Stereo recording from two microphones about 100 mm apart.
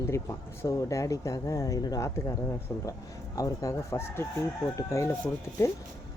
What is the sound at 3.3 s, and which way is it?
Speech, 35° left (ahead or behind).